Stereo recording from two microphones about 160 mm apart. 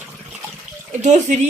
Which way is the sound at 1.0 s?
50° right (ahead or behind).